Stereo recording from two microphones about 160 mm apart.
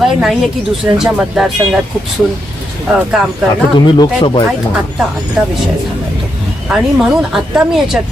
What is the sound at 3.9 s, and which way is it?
Speech, 30° left (ahead or behind).